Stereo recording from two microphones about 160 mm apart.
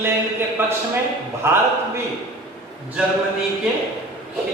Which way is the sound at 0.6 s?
15° right (ahead or behind).